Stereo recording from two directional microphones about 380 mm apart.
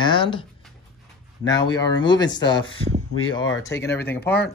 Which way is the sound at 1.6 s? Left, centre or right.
Centre.